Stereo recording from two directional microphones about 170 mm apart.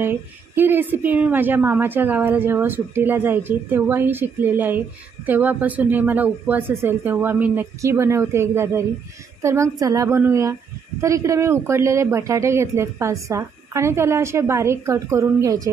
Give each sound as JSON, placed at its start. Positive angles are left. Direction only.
{"t": 0.0, "sound": "a woman's voice", "side_deg": -10}